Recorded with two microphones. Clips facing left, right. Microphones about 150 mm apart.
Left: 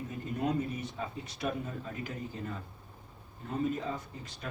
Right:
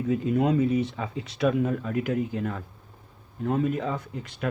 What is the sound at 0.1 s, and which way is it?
Speech, 90° right.